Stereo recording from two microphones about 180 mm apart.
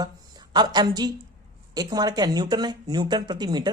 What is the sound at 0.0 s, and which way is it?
Speech, 25° right (ahead or behind).